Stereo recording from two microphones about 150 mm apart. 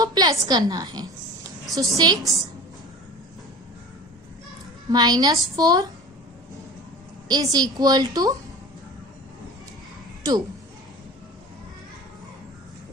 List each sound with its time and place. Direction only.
0.0 s a woman's voice: 25° right (ahead or behind)
4.9 s a woman's voice: 25° right (ahead or behind)
7.3 s a woman's voice: 25° right (ahead or behind)